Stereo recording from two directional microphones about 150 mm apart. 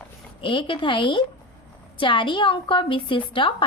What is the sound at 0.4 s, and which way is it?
A woman's voice, 35° left (ahead or behind).